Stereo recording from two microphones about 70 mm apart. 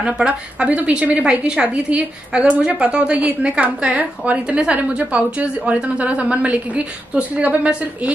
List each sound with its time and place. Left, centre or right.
0.0 s a woman's voice: centre